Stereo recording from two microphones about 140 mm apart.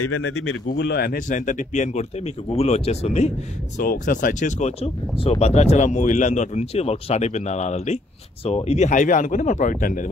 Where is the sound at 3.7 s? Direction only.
75° left (ahead or behind).